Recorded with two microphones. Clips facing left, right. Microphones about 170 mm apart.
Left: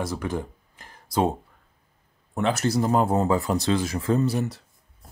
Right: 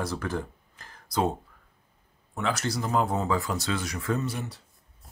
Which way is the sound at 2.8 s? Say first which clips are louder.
Left 4 dB; 45° left (ahead or behind).